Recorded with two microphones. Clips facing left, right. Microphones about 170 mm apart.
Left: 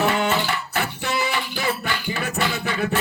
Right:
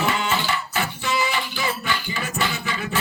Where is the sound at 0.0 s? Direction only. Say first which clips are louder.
Left 3 dB; 60° left (ahead or behind).